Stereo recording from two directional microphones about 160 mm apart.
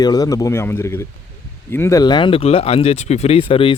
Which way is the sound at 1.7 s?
20° left (ahead or behind).